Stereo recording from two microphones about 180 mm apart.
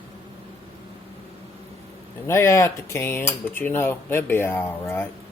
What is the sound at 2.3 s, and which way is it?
Speech, 15° left (ahead or behind).